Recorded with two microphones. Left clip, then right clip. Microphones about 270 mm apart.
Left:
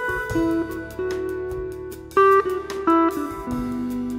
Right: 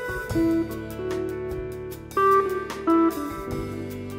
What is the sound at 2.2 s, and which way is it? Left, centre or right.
Music, left.